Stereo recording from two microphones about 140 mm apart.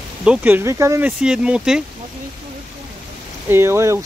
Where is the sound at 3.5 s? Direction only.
20° right (ahead or behind).